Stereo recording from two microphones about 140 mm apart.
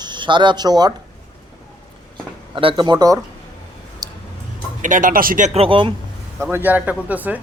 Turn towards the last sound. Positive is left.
turn(degrees=-10)  # may be behind; listen again after turning